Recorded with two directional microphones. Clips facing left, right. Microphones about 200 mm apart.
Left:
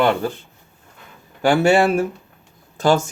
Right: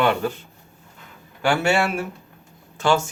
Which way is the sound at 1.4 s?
35° left (ahead or behind).